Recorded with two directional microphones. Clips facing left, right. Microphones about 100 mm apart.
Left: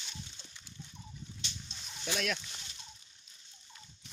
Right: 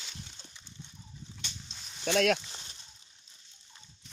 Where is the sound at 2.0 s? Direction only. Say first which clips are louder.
Right 9 dB; 90° right.